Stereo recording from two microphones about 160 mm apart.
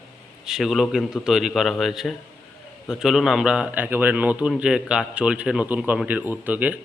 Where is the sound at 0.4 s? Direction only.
Centre (ahead or behind).